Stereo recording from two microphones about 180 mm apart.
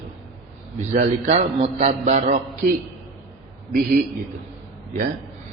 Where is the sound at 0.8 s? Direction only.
40° right (ahead or behind).